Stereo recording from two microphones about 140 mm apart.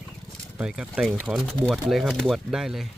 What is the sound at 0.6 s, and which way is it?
Speech, 5° right (ahead or behind).